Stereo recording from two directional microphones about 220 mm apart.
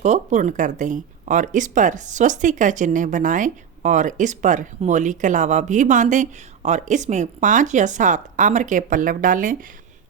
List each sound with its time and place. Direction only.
0.0 s speech: 30° right (ahead or behind)